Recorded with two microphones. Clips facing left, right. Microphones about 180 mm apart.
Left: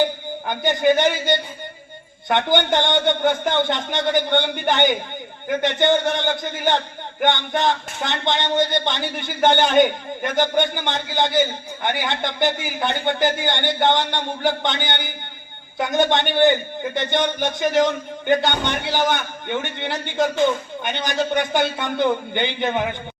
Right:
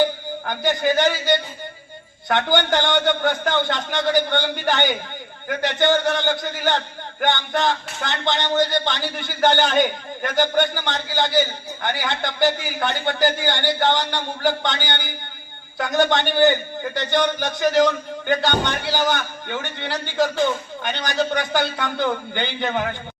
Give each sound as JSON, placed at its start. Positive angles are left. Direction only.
{"t": 0.4, "sound": "a man's voice", "side_deg": 20}